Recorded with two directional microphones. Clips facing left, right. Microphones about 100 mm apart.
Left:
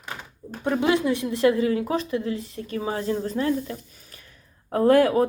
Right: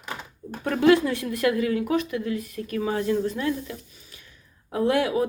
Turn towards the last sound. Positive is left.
turn(degrees=45)  # may be behind; listen again after turning